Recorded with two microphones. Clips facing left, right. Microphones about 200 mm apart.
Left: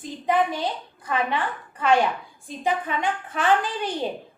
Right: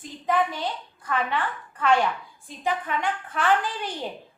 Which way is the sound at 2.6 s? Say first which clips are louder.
Left 2 dB; 20° left (ahead or behind).